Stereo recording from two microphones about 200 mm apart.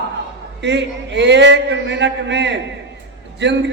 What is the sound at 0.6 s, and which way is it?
A man's voice, 60° right (ahead or behind).